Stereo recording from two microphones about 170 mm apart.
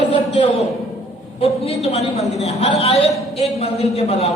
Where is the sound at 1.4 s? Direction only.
35° left (ahead or behind).